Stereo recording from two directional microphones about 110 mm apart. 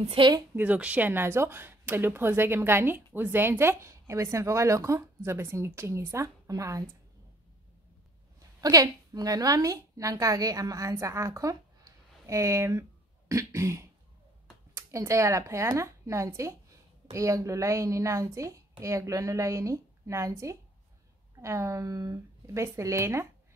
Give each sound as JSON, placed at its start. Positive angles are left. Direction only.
{"t": 0.0, "sound": "a woman's voice", "side_deg": -55}
{"t": 0.6, "sound": "a woman's voice", "side_deg": -15}
{"t": 8.5, "sound": "a woman's voice", "side_deg": -35}